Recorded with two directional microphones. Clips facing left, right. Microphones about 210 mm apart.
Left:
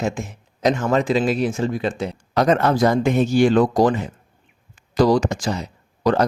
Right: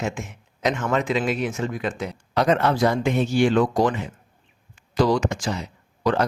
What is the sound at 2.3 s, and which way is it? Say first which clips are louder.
Speech: left 3 dB; 45° left (ahead or behind).